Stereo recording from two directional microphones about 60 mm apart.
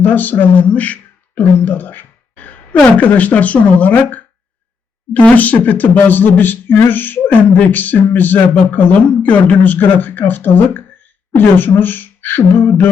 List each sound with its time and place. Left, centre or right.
0.0 s speech: left